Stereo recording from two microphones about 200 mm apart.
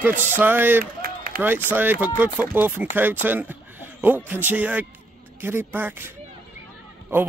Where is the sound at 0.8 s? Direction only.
45° right (ahead or behind).